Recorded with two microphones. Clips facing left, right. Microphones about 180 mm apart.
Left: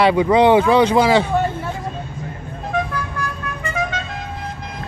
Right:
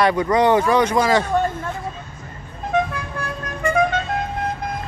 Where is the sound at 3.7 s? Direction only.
55° right (ahead or behind).